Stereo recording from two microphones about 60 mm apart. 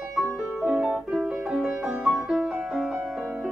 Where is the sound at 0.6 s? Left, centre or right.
Centre.